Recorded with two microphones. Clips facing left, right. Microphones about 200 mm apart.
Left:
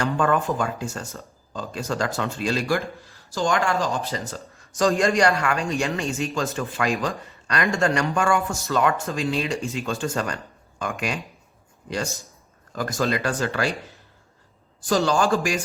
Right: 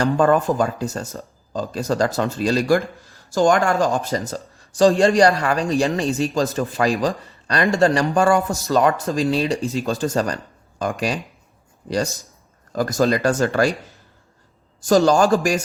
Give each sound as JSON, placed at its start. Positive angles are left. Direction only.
{"t": 0.0, "sound": "a man's voice", "side_deg": -35}
{"t": 14.8, "sound": "a man's voice", "side_deg": -45}